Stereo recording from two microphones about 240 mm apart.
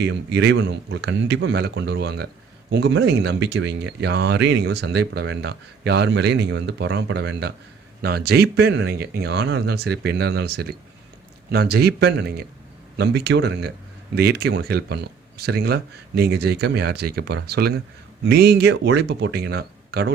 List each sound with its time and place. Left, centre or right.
0.0 s speech: right